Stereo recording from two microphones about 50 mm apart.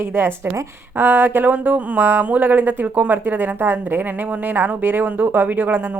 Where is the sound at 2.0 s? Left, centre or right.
Right.